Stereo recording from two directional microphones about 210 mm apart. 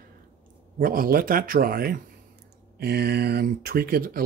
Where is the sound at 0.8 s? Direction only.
45° right (ahead or behind).